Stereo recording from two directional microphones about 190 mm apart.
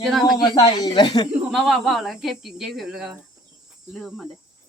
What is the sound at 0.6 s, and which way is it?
Speech, 20° left (ahead or behind).